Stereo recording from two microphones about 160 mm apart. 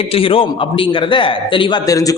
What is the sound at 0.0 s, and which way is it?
A man's voice, 35° left (ahead or behind).